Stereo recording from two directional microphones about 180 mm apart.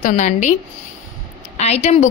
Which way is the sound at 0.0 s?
40° left (ahead or behind).